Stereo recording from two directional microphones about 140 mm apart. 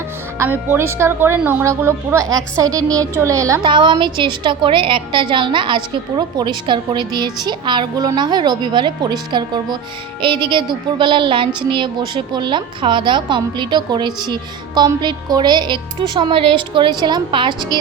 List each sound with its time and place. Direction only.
0.3 s a woman's voice: 15° right (ahead or behind)
3.6 s a woman's voice: 35° right (ahead or behind)